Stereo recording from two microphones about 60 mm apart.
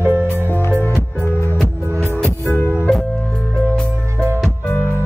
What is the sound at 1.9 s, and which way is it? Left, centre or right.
Music, right.